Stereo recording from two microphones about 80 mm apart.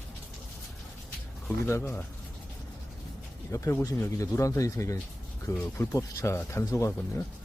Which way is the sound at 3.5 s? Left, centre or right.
Left.